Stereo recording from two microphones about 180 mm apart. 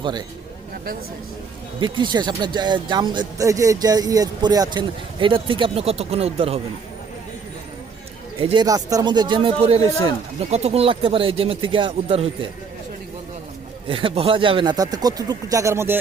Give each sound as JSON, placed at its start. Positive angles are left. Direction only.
{"t": 0.0, "sound": "speech", "side_deg": -25}
{"t": 1.8, "sound": "speech", "side_deg": -25}
{"t": 8.4, "sound": "speech", "side_deg": -30}
{"t": 8.6, "sound": "speech", "side_deg": -20}
{"t": 13.8, "sound": "speech", "side_deg": -30}